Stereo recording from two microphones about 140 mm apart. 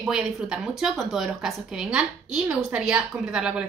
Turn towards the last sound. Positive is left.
turn(degrees=-5)  # may be behind; listen again after turning